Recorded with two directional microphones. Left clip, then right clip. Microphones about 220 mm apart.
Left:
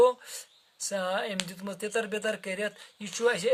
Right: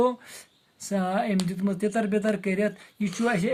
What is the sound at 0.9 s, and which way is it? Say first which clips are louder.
Speech: right 3 dB; 40° left (ahead or behind).